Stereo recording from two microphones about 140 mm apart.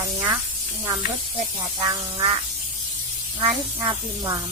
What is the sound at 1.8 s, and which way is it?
Speech, 30° right (ahead or behind).